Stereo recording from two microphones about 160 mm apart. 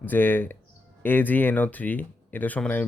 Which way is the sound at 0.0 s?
10° left (ahead or behind).